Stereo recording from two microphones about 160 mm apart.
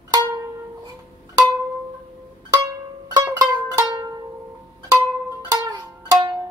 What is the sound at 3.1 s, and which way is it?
Music, 25° right (ahead or behind).